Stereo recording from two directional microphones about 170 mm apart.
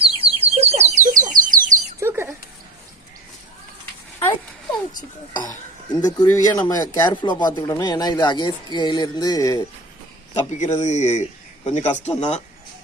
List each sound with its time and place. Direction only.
0.0 s a sound: 35° right (ahead or behind)
1.1 s bird: 50° right (ahead or behind)
2.0 s bird: 15° right (ahead or behind)
5.4 s speech: 20° left (ahead or behind)
10.6 s speech: 40° left (ahead or behind)